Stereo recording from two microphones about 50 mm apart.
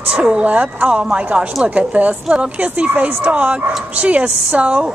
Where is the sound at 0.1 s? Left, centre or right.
Centre.